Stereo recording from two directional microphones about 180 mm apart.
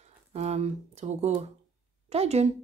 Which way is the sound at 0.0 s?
35° right (ahead or behind).